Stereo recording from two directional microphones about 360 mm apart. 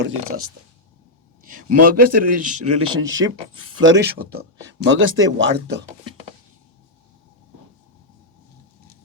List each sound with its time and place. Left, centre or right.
0.0 s speech: right
1.4 s a sound: right
1.8 s speech: right